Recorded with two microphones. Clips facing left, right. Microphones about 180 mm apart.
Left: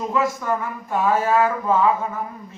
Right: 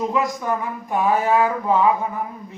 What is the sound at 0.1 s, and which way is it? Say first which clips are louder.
Speech: even; 15° right (ahead or behind).